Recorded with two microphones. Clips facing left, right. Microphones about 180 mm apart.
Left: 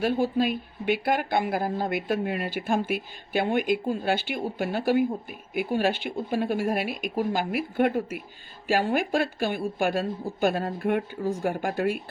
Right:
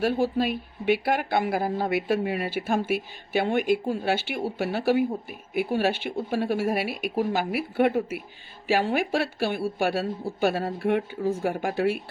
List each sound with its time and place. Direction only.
0.0 s speech: 5° right (ahead or behind)